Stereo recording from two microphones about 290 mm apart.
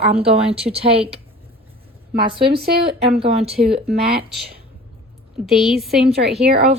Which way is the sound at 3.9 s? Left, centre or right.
Right.